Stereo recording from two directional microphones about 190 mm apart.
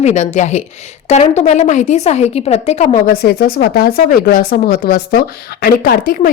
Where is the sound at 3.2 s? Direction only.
55° left (ahead or behind).